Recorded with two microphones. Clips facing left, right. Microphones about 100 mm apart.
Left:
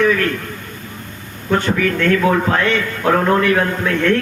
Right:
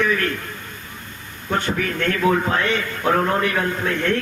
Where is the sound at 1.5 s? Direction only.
90° left.